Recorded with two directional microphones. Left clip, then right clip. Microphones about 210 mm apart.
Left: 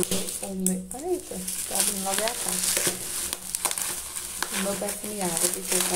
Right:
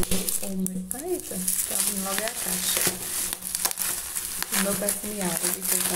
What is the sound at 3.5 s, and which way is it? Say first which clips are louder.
Crumpling: right 1 dB; 15° right (ahead or behind).